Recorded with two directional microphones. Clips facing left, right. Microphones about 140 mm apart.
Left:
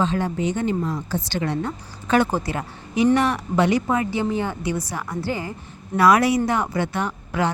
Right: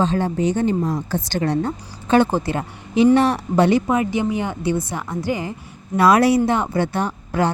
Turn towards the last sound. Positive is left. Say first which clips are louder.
# right 3 dB
turn(degrees=-35)  # may be behind; listen again after turning